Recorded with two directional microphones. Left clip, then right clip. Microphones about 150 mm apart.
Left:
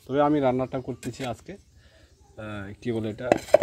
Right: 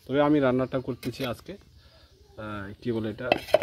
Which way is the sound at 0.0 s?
15° right (ahead or behind).